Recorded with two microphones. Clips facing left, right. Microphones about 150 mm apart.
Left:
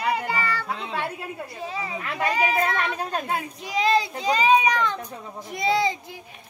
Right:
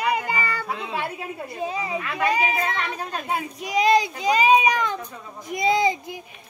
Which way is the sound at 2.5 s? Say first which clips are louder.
Left 2 dB; 45° left (ahead or behind).